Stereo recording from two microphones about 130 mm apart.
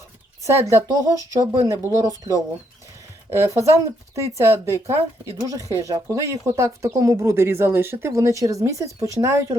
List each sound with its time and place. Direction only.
0.4 s speech: 25° right (ahead or behind)